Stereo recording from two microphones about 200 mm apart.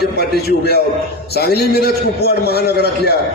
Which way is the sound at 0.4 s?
50° left (ahead or behind).